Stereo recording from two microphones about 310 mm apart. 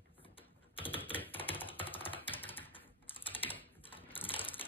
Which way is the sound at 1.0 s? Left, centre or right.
Centre.